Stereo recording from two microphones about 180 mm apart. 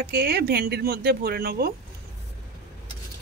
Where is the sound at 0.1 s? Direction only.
60° right (ahead or behind).